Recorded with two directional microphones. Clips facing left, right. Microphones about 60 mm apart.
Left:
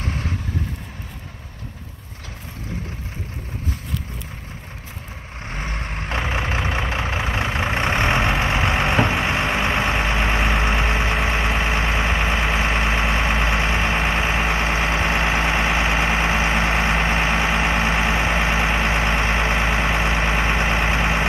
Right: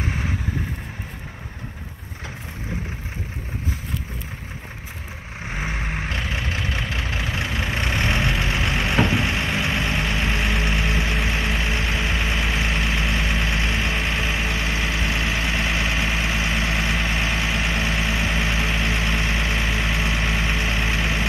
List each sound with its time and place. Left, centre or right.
0.0 s vehicle: centre
5.4 s vehicle: centre
6.0 s vehicle: left